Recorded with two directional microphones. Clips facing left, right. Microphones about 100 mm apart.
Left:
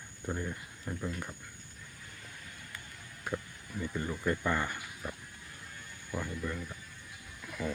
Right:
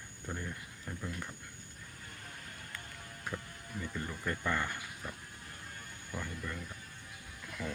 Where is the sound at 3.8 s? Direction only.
10° left (ahead or behind).